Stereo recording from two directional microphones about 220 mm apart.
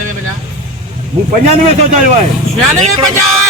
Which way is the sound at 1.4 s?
30° right (ahead or behind).